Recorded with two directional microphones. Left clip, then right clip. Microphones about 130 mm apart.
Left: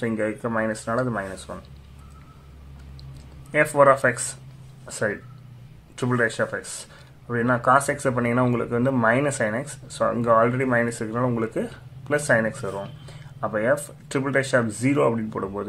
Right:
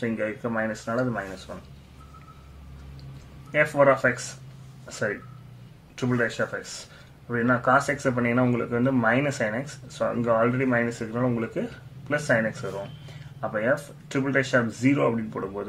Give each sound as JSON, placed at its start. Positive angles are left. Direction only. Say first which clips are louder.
{"t": 0.0, "sound": "speech", "louder": "left 3 dB", "side_deg": 30}
{"t": 3.5, "sound": "speech", "louder": "left 3 dB", "side_deg": 30}